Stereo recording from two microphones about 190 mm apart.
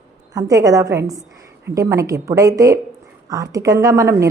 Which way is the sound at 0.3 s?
20° right (ahead or behind).